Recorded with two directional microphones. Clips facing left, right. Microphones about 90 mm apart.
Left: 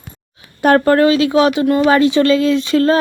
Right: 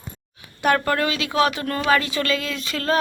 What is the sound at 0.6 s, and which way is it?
A woman's voice, 40° left (ahead or behind).